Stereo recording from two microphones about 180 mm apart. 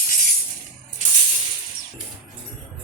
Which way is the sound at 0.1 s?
55° left (ahead or behind).